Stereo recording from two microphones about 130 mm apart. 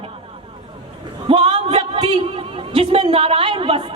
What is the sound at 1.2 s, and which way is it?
Speech, 45° right (ahead or behind).